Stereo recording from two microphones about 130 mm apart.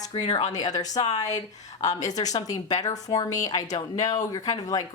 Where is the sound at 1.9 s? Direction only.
65° left (ahead or behind).